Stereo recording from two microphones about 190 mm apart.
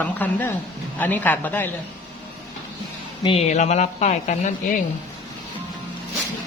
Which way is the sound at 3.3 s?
35° left (ahead or behind).